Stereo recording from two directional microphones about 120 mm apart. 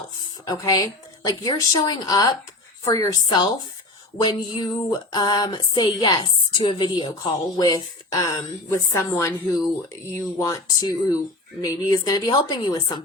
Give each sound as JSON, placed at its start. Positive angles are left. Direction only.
{"t": 0.4, "sound": "a woman's voice", "side_deg": 30}
{"t": 3.2, "sound": "a woman's voice", "side_deg": 40}